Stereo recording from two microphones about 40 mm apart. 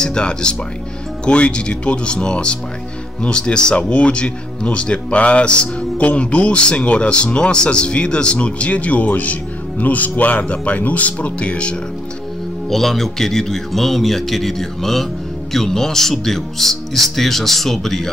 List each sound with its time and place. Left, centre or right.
0.0 s speech: left
12.6 s a man's voice: centre